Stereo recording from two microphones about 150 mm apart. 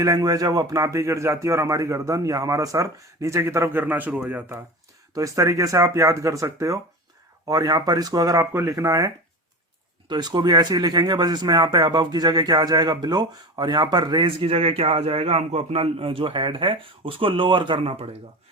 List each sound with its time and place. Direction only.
0.0 s a man's voice: 25° right (ahead or behind)